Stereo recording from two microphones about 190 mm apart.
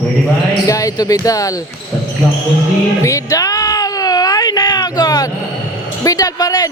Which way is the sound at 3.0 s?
15° left (ahead or behind).